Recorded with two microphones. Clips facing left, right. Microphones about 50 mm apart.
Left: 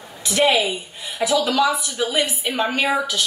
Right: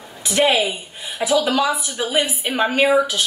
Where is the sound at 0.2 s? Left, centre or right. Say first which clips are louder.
Right 1 dB; right.